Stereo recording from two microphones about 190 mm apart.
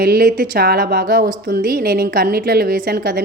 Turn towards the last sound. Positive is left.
turn(degrees=-50)  # may be behind; listen again after turning